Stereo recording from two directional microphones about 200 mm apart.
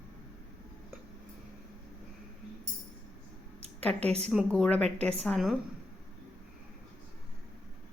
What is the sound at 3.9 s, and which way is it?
Speech, 30° right (ahead or behind).